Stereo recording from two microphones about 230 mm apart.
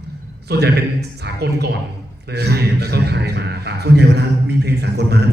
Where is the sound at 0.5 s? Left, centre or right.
Right.